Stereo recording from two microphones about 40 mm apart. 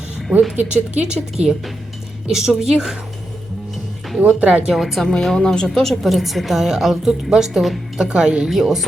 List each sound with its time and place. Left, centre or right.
0.5 s speech: right
0.9 s a woman's voice: right
4.2 s speech: right
4.6 s a woman's voice: centre
5.2 s a woman's voice: centre